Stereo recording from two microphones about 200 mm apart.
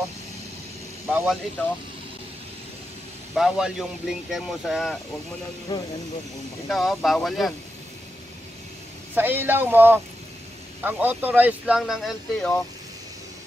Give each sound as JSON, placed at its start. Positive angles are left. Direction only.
{"t": 1.0, "sound": "a man's voice", "side_deg": 0}
{"t": 3.3, "sound": "speech", "side_deg": -5}
{"t": 5.7, "sound": "speech", "side_deg": 20}
{"t": 6.7, "sound": "speech", "side_deg": 0}
{"t": 9.1, "sound": "speech", "side_deg": -10}